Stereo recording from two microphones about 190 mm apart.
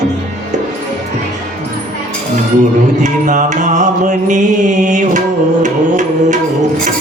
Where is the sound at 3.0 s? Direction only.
40° right (ahead or behind).